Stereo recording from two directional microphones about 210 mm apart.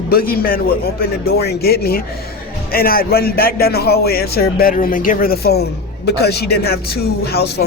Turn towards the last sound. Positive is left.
turn(degrees=50)  # may be behind; listen again after turning